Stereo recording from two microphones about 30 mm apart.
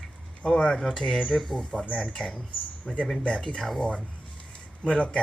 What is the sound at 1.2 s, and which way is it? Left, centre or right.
Speech, centre.